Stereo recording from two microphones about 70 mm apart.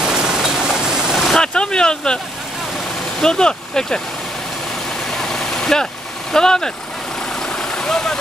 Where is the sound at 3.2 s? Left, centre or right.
Centre.